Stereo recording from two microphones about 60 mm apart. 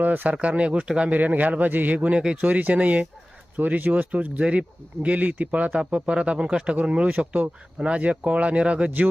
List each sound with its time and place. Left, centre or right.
0.0 s speech: right